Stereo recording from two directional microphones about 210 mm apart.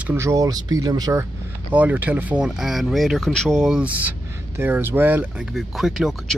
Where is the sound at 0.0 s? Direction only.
10° right (ahead or behind).